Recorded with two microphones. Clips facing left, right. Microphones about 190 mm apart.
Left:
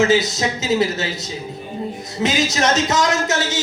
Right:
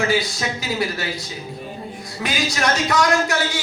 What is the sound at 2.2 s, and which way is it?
A man's voice, 20° left (ahead or behind).